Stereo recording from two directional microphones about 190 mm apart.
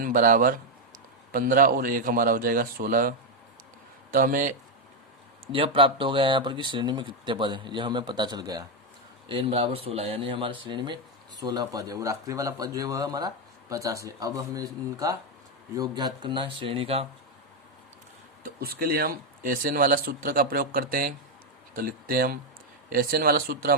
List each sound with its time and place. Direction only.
0.0 s speech: 45° right (ahead or behind)
5.5 s speech: 30° right (ahead or behind)
18.4 s speech: 50° right (ahead or behind)